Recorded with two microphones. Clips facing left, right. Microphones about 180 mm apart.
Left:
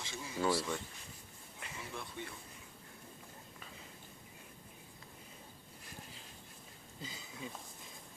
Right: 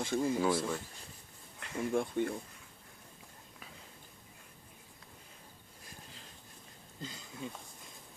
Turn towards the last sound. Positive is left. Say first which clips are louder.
# right 3 dB
turn(degrees=0)  # may be behind; listen again after turning